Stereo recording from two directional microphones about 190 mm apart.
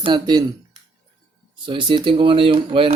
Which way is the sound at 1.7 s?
25° right (ahead or behind).